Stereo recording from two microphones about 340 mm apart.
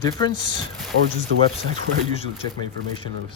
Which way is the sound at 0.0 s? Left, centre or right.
Centre.